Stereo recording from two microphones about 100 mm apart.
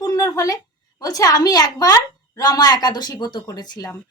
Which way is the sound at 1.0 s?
40° left (ahead or behind).